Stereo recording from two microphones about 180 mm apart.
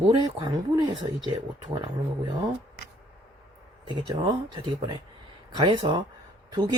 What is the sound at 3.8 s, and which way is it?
Speech, 25° right (ahead or behind).